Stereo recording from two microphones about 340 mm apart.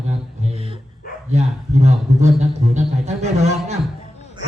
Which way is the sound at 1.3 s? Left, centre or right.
Centre.